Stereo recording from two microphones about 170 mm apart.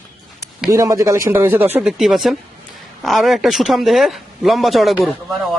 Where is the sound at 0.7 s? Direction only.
20° right (ahead or behind); by 4.9 s centre (ahead or behind).